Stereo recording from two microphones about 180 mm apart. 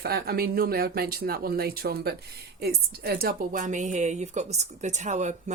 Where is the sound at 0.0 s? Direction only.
60° right (ahead or behind).